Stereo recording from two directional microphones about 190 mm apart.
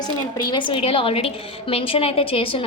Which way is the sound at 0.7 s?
30° left (ahead or behind).